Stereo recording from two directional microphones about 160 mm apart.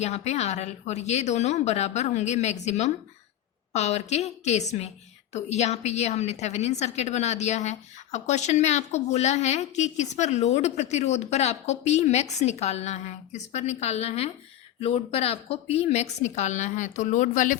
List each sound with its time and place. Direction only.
0.0 s a woman's voice: 45° left (ahead or behind)